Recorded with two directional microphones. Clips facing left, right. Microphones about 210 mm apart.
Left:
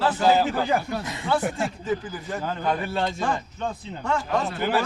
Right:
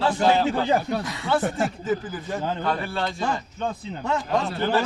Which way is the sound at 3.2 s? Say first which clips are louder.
Even; 5° right (ahead or behind).